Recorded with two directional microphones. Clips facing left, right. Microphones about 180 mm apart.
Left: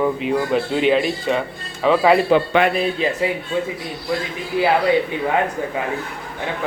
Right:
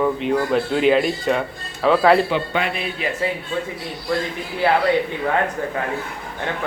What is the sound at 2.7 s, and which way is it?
Speech, 35° left (ahead or behind).